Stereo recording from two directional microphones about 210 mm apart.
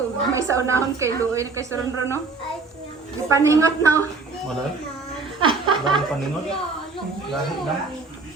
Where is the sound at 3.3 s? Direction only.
15° right (ahead or behind).